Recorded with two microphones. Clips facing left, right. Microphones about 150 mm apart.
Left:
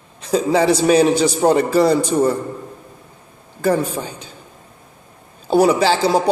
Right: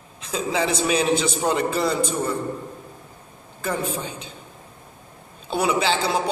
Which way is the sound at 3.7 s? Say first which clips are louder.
Left 5 dB; 35° left (ahead or behind).